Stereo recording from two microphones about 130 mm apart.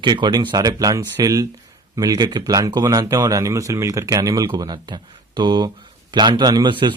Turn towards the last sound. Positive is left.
turn(degrees=-30)  # may be behind; listen again after turning